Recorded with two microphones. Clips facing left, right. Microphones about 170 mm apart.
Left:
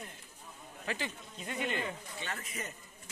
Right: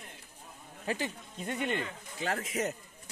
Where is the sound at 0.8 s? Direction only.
40° right (ahead or behind).